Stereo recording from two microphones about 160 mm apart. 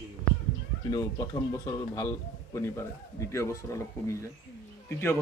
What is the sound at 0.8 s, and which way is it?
A man's voice, 25° left (ahead or behind).